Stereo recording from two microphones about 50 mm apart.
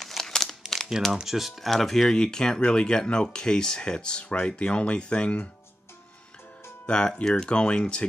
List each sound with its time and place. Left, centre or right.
0.0 s crumpling: centre
1.2 s speech: centre
2.1 s speech: centre
6.9 s speech: centre